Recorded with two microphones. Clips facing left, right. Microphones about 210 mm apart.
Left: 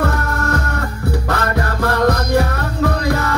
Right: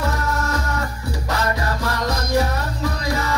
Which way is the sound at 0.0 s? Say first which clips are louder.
Left 4 dB; 60° left (ahead or behind).